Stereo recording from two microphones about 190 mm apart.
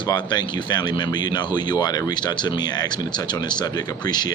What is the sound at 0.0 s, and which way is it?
Speech, 25° left (ahead or behind).